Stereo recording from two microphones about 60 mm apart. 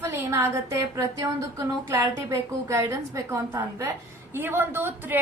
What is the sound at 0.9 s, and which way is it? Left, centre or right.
A woman's voice, right.